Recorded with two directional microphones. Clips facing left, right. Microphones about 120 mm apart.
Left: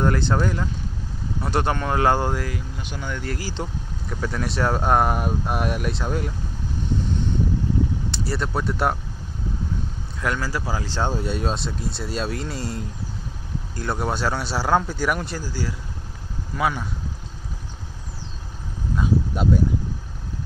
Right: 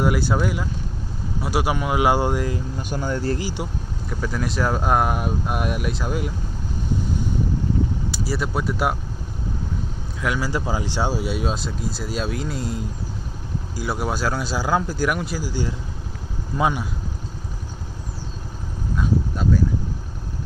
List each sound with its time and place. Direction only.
0.0 s speech: 5° right (ahead or behind)
2.8 s speech: 40° right (ahead or behind)
3.3 s speech: 15° right (ahead or behind)
4.1 s speech: centre (ahead or behind)
8.1 s speech: 5° right (ahead or behind)
10.2 s speech: 5° right (ahead or behind)
10.5 s speech: 20° right (ahead or behind); by 15.5 s 5° right (ahead or behind)
16.5 s speech: 20° right (ahead or behind)